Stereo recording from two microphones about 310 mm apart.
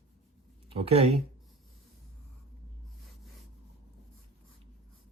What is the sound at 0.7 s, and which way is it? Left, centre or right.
Speech, centre.